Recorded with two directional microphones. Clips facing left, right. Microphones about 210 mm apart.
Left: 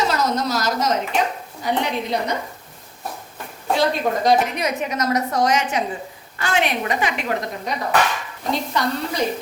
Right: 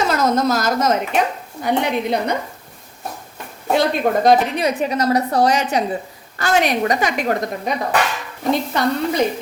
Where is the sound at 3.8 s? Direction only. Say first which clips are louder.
Right 3 dB; 55° right (ahead or behind).